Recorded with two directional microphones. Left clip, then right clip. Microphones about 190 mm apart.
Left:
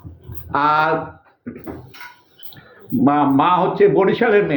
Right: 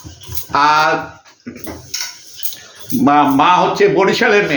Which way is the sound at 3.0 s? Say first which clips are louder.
Right 5 dB; 15° right (ahead or behind).